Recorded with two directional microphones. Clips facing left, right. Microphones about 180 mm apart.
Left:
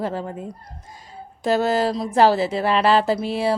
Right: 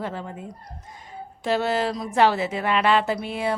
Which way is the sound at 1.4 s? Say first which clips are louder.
Left 4 dB; 40° left (ahead or behind).